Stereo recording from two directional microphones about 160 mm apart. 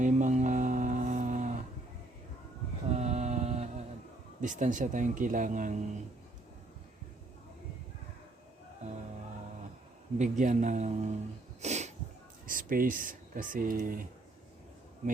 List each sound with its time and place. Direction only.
0.0 s a sound: 50° right (ahead or behind)
2.9 s a sound: 45° right (ahead or behind)
4.4 s speech: 50° right (ahead or behind)
10.2 s speech: 50° right (ahead or behind)
11.6 s wheeze: 45° right (ahead or behind)
12.5 s speech: 60° right (ahead or behind)